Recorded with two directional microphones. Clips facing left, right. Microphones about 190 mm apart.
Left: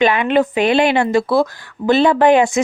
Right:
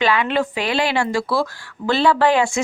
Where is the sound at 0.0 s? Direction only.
20° left (ahead or behind).